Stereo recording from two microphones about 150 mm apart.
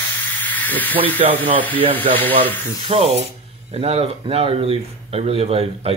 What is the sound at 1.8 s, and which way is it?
Speech, 40° right (ahead or behind).